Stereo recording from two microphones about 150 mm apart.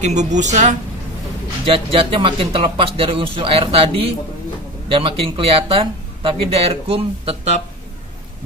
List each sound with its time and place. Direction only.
0.0 s a woman's voice: 50° right (ahead or behind)
1.6 s speech: 40° right (ahead or behind)